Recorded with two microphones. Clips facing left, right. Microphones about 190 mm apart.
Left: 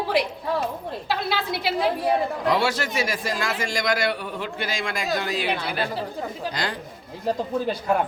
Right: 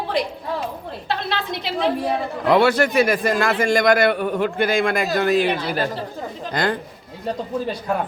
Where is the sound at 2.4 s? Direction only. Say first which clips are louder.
Right 10 dB; 60° right (ahead or behind); by 5.9 s 45° right (ahead or behind).